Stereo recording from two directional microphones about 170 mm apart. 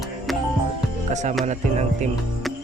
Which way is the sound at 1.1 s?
45° right (ahead or behind).